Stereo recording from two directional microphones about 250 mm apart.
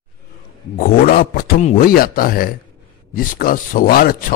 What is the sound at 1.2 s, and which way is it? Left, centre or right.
A man's voice, left.